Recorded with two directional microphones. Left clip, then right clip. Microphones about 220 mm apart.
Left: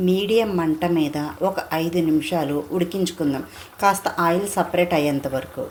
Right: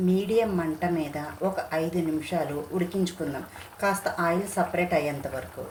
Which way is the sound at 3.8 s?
35° left (ahead or behind).